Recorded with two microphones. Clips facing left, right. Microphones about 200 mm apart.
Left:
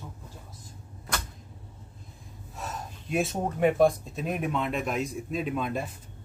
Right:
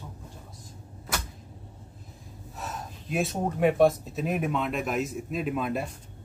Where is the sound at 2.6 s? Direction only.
Centre (ahead or behind).